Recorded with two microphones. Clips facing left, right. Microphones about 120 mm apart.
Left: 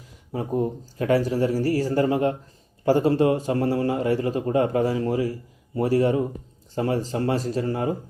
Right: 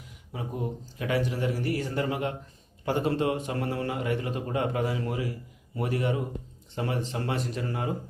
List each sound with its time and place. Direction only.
0.3 s a man's voice: 40° left (ahead or behind)